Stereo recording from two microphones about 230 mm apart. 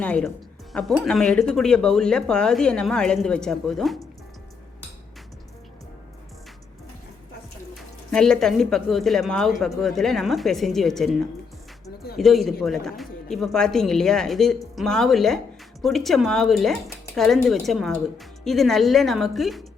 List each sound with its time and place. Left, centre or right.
0.0 s speech: centre
8.1 s speech: centre
12.1 s speech: centre